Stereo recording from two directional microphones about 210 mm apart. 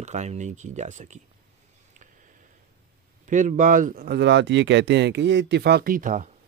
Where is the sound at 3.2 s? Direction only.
35° right (ahead or behind).